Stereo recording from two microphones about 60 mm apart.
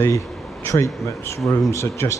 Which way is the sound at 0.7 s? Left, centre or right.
Left.